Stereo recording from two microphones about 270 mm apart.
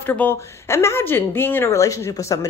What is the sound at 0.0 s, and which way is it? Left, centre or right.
Speech, centre.